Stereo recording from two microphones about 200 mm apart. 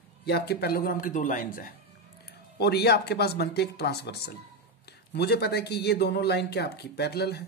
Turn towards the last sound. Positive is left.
turn(degrees=55)  # may be behind; listen again after turning